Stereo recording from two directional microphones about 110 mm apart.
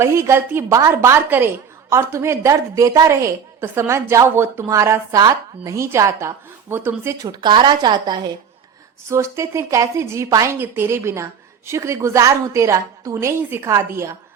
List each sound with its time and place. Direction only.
0.0 s a woman's voice: 25° right (ahead or behind)
7.4 s a woman's voice: 45° right (ahead or behind)
9.0 s a woman's voice: 25° right (ahead or behind)